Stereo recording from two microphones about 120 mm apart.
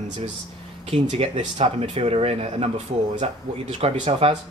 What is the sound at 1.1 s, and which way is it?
Speech, 70° right (ahead or behind).